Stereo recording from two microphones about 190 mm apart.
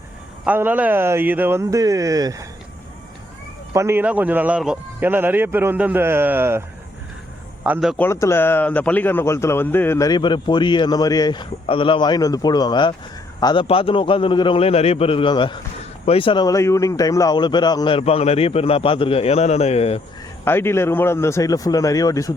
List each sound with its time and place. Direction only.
0.4 s a man's voice: 10° right (ahead or behind)
3.7 s a man's voice: 15° right (ahead or behind)
7.6 s a man's voice: 5° right (ahead or behind)
7.9 s a man's voice: 15° left (ahead or behind); by 20.0 s 35° left (ahead or behind)
20.4 s a man's voice: 10° left (ahead or behind)